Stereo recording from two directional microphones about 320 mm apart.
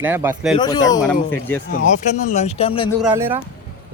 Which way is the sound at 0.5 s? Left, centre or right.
Centre.